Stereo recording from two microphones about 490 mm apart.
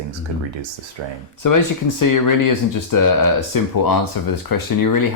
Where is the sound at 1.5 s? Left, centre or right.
Left.